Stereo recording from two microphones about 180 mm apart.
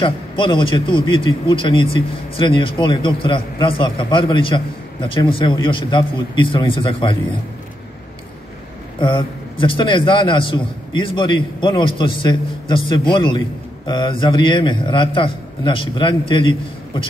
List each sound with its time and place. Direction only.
0.0 s a man's voice: 25° left (ahead or behind)
9.0 s a man's voice: 25° left (ahead or behind)